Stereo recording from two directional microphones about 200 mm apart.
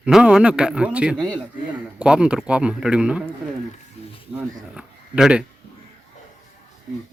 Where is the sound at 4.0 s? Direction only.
30° left (ahead or behind).